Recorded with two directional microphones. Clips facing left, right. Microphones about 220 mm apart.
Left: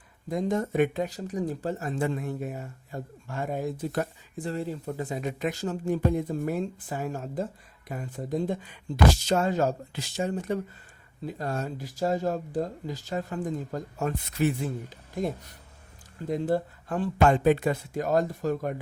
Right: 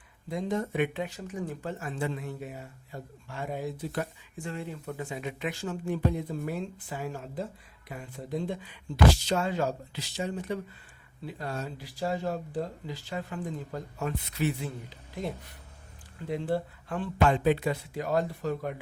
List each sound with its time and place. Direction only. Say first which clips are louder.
0.3 s speech: left 3 dB; 45° left (ahead or behind)